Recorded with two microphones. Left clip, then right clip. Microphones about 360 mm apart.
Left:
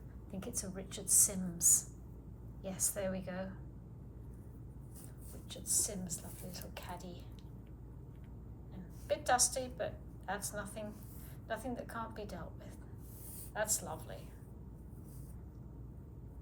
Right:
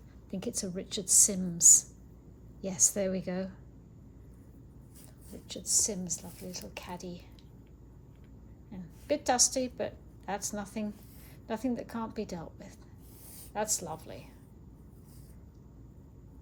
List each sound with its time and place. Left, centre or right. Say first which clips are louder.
0.3 s a woman's voice: right 8 dB; centre
5.5 s a woman's voice: right 8 dB; centre
9.0 s a woman's voice: right 4 dB; centre